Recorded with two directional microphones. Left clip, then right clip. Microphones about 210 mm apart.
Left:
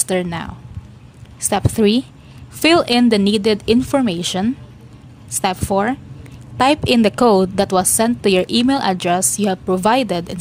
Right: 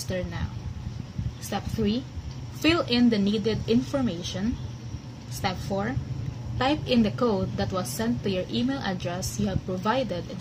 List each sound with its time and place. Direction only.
0.1 s a woman's voice: 50° left (ahead or behind)
1.5 s a woman's voice: 50° left (ahead or behind)